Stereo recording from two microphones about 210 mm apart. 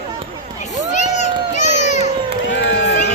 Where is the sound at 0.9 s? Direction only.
35° left (ahead or behind).